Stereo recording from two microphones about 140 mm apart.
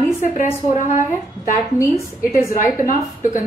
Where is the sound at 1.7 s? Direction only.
20° left (ahead or behind).